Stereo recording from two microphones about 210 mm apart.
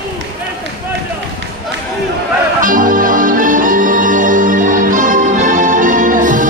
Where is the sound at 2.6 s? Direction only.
40° right (ahead or behind).